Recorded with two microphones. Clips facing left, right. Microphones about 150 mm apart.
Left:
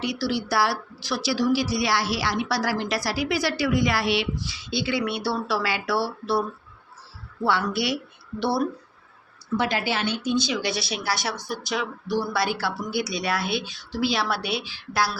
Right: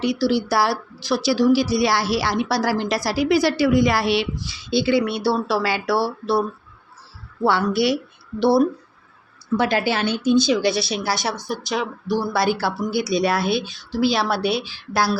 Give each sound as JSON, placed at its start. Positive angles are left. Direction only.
{"t": 0.0, "sound": "speech", "side_deg": -30}
{"t": 7.4, "sound": "speech", "side_deg": -35}
{"t": 8.4, "sound": "speech", "side_deg": -20}
{"t": 9.6, "sound": "speech", "side_deg": -40}